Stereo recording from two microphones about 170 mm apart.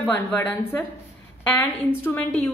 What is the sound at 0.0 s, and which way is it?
A woman's voice, 10° left (ahead or behind).